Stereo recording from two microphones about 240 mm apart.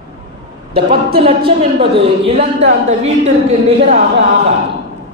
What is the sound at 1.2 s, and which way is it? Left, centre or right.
A man's voice, right.